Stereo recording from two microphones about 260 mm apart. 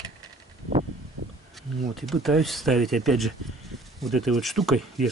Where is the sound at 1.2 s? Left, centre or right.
Right.